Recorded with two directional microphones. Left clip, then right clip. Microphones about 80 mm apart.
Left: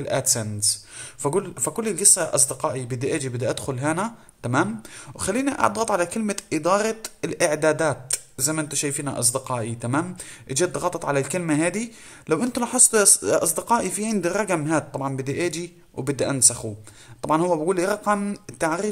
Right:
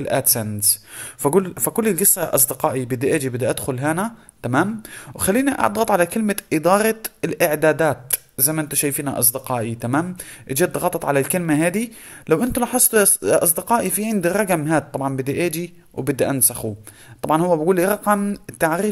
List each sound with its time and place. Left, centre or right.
0.0 s speech: right
1.2 s speech: right
5.2 s speech: right